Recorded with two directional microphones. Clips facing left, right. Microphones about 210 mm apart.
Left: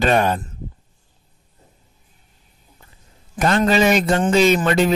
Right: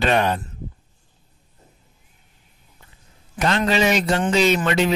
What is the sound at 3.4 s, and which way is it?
Speech, 45° left (ahead or behind).